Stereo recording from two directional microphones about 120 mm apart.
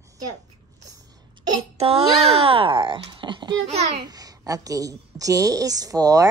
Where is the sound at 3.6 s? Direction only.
65° right (ahead or behind).